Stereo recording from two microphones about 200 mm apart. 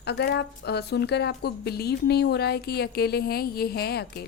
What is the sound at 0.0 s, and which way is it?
A woman's voice, 55° left (ahead or behind).